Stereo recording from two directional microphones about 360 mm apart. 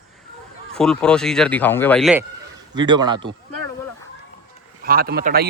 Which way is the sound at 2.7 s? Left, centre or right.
Centre.